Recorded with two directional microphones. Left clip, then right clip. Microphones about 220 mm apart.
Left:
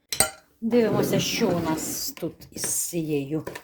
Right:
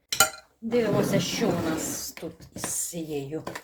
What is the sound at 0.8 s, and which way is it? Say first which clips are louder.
Speech: left 2 dB; 50° left (ahead or behind).